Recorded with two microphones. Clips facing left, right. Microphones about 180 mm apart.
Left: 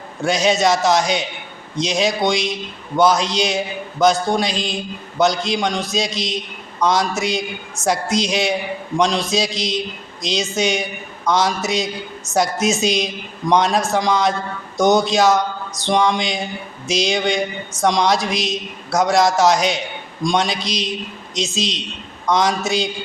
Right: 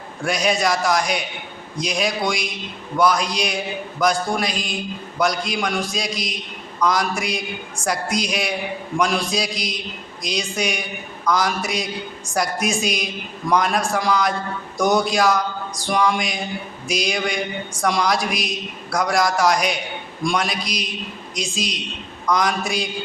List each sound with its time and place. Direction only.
0.3 s a woman's voice: 25° left (ahead or behind)